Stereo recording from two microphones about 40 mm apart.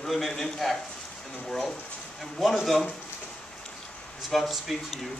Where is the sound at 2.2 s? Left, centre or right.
Centre.